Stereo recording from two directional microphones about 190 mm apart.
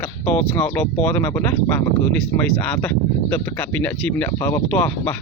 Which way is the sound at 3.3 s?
10° left (ahead or behind).